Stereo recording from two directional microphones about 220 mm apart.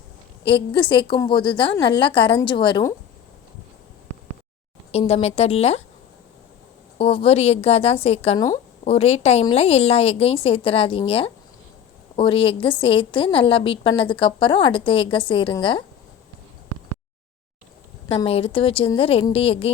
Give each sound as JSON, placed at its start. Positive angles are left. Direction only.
{"t": 0.4, "sound": "a woman's voice", "side_deg": 20}
{"t": 4.9, "sound": "a woman's voice", "side_deg": 30}
{"t": 7.0, "sound": "a woman's voice", "side_deg": 25}
{"t": 18.1, "sound": "a woman's voice", "side_deg": 25}